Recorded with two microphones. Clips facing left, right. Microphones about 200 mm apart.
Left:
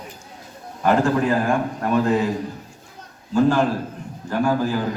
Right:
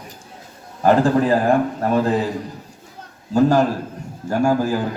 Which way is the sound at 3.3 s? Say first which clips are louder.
Right 2 dB; 40° right (ahead or behind).